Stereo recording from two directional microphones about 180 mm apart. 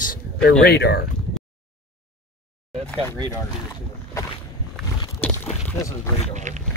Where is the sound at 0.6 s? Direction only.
65° left (ahead or behind).